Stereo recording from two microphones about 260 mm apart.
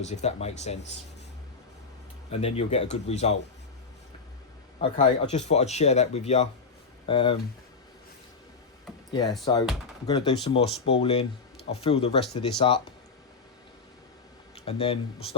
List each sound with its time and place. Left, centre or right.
0.0 s speech: left
2.3 s speech: left
4.8 s speech: left
9.4 s speech: centre
14.5 s speech: left